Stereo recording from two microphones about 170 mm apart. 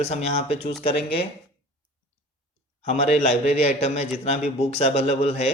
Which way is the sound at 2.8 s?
40° left (ahead or behind).